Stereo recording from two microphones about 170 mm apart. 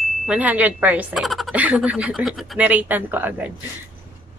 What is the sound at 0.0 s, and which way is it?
A woman's voice, 5° right (ahead or behind).